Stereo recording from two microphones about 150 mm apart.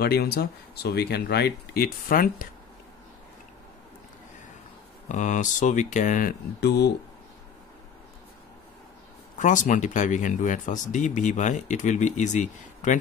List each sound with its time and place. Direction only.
0.0 s speech: 90° left; by 2.4 s 70° left (ahead or behind)
5.0 s speech: 55° left (ahead or behind); by 6.9 s 90° left
9.4 s speech: 55° left (ahead or behind)